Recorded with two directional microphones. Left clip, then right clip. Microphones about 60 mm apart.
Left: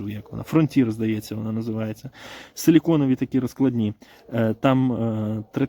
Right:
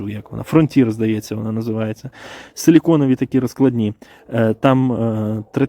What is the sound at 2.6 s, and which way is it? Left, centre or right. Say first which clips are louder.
Speech: right 5 dB; right.